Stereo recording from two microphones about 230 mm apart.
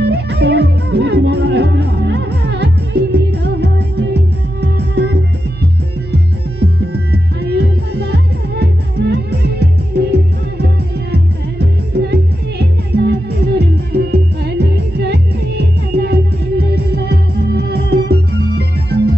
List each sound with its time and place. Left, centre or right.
0.0 s music: right
6.9 s music: right